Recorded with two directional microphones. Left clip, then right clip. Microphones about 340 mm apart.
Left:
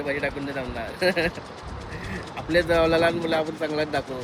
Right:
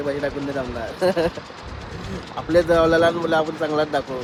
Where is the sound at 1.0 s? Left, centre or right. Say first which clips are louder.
Right 3 dB; right.